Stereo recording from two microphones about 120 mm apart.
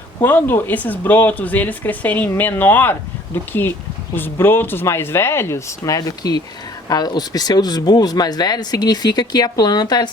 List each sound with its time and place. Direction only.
0.2 s speech: 15° left (ahead or behind); by 10.1 s 35° left (ahead or behind)